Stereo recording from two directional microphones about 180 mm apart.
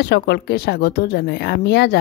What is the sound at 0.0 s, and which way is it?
Speech, 65° left (ahead or behind).